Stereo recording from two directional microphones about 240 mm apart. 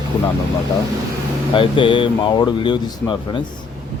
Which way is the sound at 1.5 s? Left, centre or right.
Left.